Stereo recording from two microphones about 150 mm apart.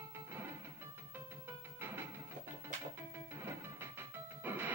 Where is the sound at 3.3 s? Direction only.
15° right (ahead or behind).